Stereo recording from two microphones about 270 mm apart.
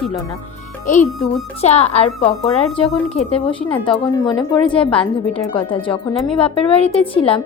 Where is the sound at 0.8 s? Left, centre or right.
Left.